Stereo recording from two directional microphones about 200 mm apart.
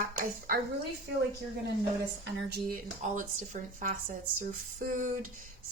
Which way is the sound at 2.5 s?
45° right (ahead or behind).